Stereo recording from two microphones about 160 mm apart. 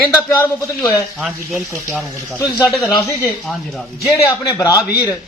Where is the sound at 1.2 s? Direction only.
Centre (ahead or behind).